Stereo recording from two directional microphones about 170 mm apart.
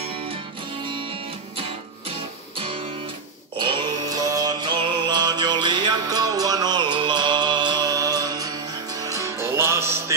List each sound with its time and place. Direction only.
3.6 s music: 25° right (ahead or behind)